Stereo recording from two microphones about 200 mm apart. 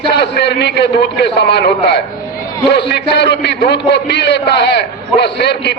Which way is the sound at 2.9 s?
55° left (ahead or behind).